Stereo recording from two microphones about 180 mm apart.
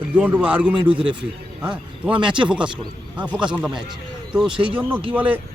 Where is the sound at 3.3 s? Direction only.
5° right (ahead or behind).